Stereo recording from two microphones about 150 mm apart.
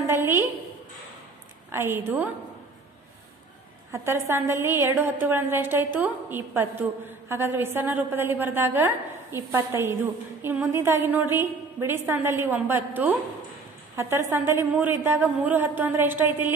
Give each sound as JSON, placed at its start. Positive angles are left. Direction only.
{"t": 0.0, "sound": "a sound", "side_deg": -15}
{"t": 1.7, "sound": "a woman's voice", "side_deg": -15}
{"t": 3.9, "sound": "a woman's voice", "side_deg": -20}